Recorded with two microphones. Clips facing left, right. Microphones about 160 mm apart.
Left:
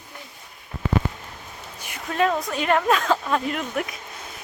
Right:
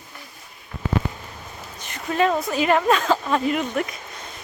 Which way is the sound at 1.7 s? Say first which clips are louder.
Right 1 dB; 10° left (ahead or behind).